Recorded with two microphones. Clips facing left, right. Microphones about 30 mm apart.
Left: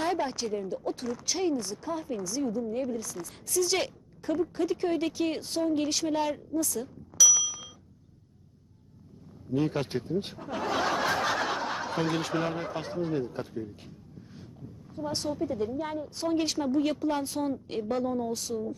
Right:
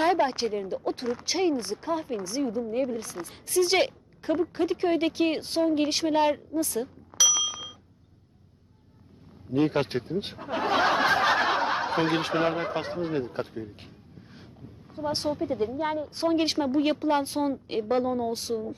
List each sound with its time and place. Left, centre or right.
0.0 s speech: right
9.5 s speech: right